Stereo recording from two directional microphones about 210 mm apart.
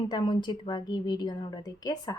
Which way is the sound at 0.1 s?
20° left (ahead or behind).